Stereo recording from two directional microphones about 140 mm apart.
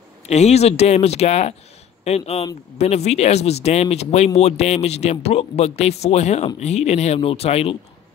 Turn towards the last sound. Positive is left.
turn(degrees=45)  # may be behind; listen again after turning